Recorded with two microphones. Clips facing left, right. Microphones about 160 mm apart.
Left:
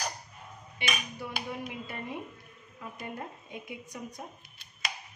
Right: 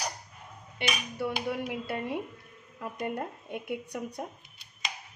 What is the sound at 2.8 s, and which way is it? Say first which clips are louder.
Speech: right 6 dB; 65° right (ahead or behind).